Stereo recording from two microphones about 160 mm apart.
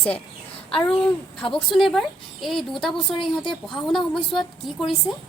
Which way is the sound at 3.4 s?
30° left (ahead or behind).